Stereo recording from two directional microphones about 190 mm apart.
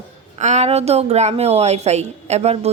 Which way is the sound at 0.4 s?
35° right (ahead or behind).